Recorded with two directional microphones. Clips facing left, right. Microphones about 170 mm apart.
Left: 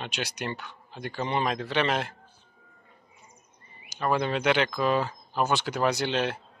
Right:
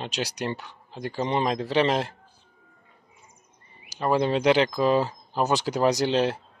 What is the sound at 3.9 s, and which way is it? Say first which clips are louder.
Speech: right 4 dB; 30° right (ahead or behind).